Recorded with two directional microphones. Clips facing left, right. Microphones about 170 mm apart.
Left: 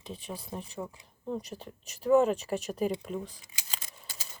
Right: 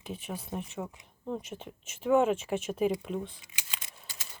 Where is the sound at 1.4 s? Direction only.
Centre (ahead or behind).